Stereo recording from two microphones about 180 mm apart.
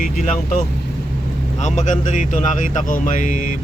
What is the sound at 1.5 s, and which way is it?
Speech, 40° left (ahead or behind).